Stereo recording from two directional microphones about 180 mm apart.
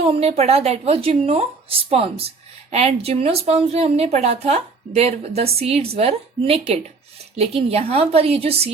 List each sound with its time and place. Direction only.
0.1 s a woman's voice: 35° right (ahead or behind)